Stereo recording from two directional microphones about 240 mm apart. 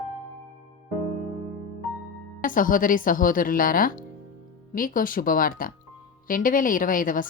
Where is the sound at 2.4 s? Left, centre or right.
Left.